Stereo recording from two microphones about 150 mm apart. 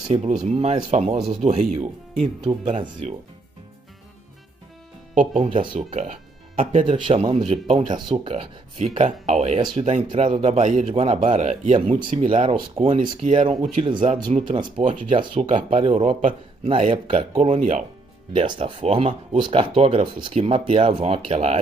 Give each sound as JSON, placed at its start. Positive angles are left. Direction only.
{"t": 0.1, "sound": "speech", "side_deg": -50}
{"t": 5.1, "sound": "speech", "side_deg": -65}
{"t": 5.4, "sound": "speech", "side_deg": -35}
{"t": 5.9, "sound": "music", "side_deg": -40}
{"t": 7.3, "sound": "speech", "side_deg": -45}
{"t": 8.2, "sound": "speech", "side_deg": -40}
{"t": 13.3, "sound": "speech", "side_deg": -50}
{"t": 14.0, "sound": "speech", "side_deg": -35}
{"t": 14.8, "sound": "speech", "side_deg": -55}
{"t": 15.8, "sound": "speech", "side_deg": -45}
{"t": 17.5, "sound": "speech", "side_deg": -55}
{"t": 18.3, "sound": "speech", "side_deg": -35}